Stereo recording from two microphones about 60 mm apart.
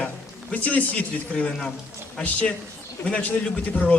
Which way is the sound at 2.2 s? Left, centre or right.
Left.